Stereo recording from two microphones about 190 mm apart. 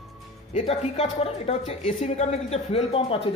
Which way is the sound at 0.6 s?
30° left (ahead or behind).